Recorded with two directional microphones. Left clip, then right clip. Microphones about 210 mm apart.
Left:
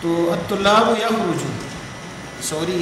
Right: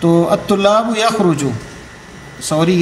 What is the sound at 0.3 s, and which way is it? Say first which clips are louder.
Speech: right 4 dB; 20° right (ahead or behind).